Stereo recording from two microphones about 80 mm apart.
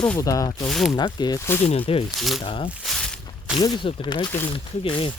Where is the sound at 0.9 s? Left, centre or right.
Left.